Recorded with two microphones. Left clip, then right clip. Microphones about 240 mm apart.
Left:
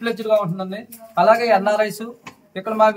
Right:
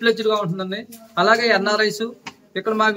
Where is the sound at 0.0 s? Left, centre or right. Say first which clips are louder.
Even; centre.